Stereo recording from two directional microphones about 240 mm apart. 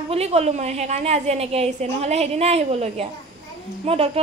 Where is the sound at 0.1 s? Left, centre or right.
Right.